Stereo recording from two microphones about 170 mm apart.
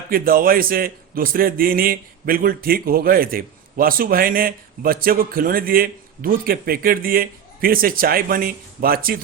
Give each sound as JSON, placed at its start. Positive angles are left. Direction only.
{"t": 0.1, "sound": "a man's voice", "side_deg": -60}